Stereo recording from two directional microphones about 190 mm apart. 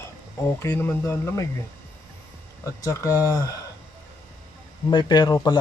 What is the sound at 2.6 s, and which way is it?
Speech, 15° left (ahead or behind).